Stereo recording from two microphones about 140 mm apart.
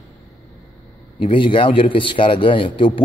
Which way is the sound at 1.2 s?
35° left (ahead or behind).